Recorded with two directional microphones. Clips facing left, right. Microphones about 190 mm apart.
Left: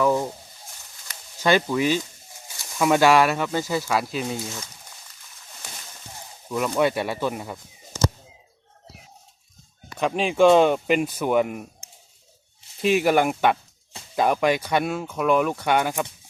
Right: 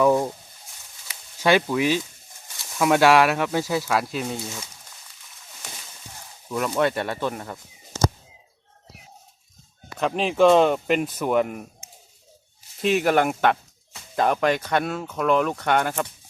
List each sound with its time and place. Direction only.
0.0 s speech: 20° right (ahead or behind)
1.0 s speech: 5° right (ahead or behind)
6.5 s speech: centre (ahead or behind)
10.0 s speech: centre (ahead or behind)
12.8 s speech: 5° left (ahead or behind)